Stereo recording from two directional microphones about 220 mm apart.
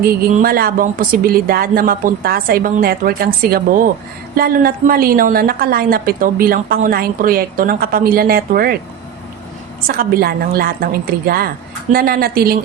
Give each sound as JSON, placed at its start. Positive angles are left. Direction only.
{"t": 0.3, "sound": "speech", "side_deg": -40}
{"t": 4.4, "sound": "speech", "side_deg": -40}
{"t": 9.8, "sound": "a woman's voice", "side_deg": -40}